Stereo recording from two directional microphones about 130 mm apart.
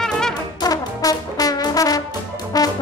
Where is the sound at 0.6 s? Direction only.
30° left (ahead or behind).